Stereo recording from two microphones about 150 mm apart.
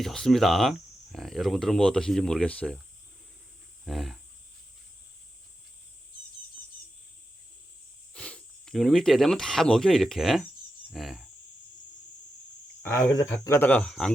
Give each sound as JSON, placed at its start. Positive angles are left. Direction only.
{"t": 0.0, "sound": "speech", "side_deg": 0}
{"t": 3.8, "sound": "speech", "side_deg": 0}
{"t": 8.1, "sound": "speech", "side_deg": 5}
{"t": 13.0, "sound": "speech", "side_deg": 25}